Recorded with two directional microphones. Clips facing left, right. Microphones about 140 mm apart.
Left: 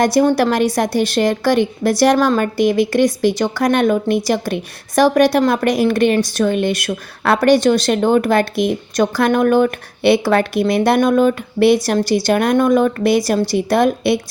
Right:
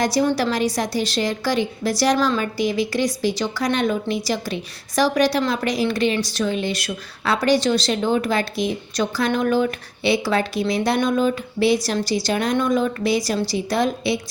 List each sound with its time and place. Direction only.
0.0 s a woman's voice: 55° left (ahead or behind)